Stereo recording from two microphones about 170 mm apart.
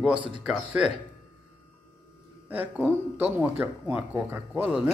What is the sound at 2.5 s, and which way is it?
Speech, 10° right (ahead or behind).